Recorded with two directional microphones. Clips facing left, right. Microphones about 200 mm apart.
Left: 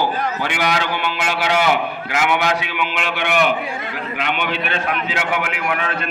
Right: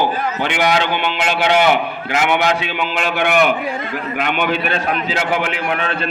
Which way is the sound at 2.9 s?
45° right (ahead or behind).